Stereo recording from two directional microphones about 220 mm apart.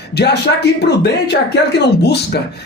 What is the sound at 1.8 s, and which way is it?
Speech, 50° left (ahead or behind).